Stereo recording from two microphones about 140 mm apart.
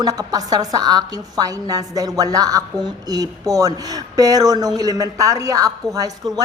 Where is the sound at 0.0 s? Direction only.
25° right (ahead or behind).